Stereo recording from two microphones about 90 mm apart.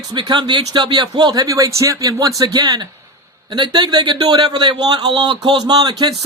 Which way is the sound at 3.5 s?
60° right (ahead or behind).